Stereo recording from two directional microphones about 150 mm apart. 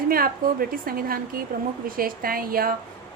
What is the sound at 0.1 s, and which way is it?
A woman's voice, 75° right (ahead or behind).